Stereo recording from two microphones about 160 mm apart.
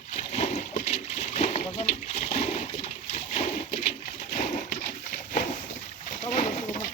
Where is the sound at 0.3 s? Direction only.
45° left (ahead or behind).